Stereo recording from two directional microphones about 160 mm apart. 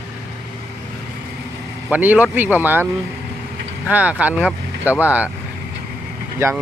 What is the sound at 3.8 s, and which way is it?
Speech, 10° right (ahead or behind).